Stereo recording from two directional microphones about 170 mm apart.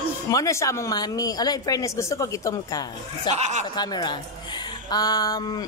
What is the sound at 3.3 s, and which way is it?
Speech, 40° right (ahead or behind).